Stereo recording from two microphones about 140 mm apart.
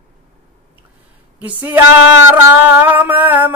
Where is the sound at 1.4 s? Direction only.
10° right (ahead or behind).